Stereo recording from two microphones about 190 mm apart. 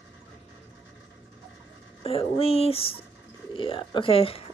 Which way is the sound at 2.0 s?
30° left (ahead or behind).